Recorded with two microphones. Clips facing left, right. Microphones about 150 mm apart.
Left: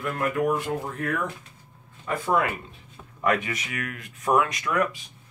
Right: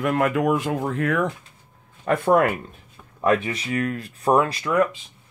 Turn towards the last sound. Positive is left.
turn(degrees=-25)  # may be behind; listen again after turning